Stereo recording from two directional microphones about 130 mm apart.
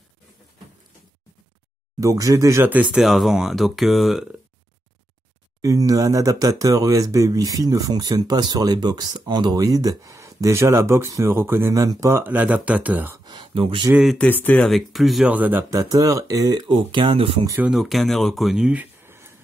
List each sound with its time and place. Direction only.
2.0 s speech: 25° right (ahead or behind); by 4.3 s centre (ahead or behind)
5.6 s speech: 25° right (ahead or behind)
13.2 s a sound: 35° right (ahead or behind)
13.6 s speech: 40° right (ahead or behind)
14.1 s speech: 10° left (ahead or behind)
14.7 s speech: centre (ahead or behind)
15.3 s speech: 10° right (ahead or behind)
15.7 s speech: 25° right (ahead or behind); by 17.5 s 45° right (ahead or behind)
17.6 s speech: 5° right (ahead or behind); by 19.3 s 20° right (ahead or behind)